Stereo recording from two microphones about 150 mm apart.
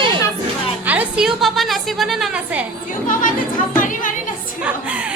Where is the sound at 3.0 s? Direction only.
60° left (ahead or behind).